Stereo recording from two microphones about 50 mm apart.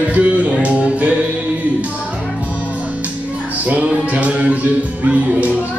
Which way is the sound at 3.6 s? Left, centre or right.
Right.